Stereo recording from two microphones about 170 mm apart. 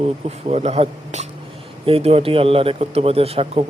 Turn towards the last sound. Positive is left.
turn(degrees=-35)  # may be behind; listen again after turning